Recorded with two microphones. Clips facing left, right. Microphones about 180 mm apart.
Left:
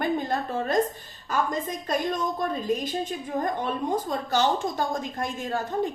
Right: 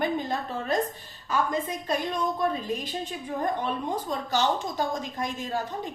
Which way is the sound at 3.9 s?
50° left (ahead or behind).